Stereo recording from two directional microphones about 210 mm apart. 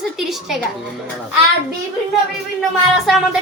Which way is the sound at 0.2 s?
Centre (ahead or behind).